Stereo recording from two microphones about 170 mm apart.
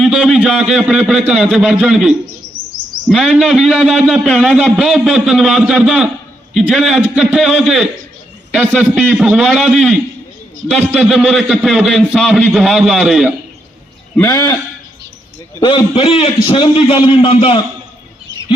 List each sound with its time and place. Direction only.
0.0 s a man's voice: centre (ahead or behind)
14.2 s a man's voice: 20° left (ahead or behind)
15.6 s a man's voice: 25° left (ahead or behind)